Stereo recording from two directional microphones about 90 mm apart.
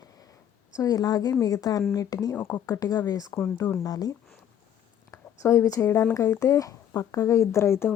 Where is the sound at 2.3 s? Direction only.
20° left (ahead or behind).